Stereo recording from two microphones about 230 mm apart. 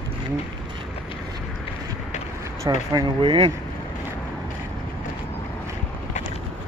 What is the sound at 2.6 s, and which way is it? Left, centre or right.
Speech, centre.